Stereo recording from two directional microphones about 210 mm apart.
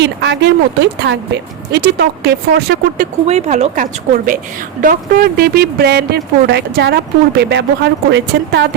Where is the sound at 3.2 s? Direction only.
30° right (ahead or behind); by 8.6 s 55° right (ahead or behind).